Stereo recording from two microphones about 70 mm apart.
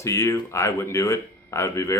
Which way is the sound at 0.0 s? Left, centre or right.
Left.